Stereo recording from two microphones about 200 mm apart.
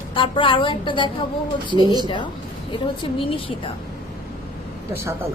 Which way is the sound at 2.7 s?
25° left (ahead or behind).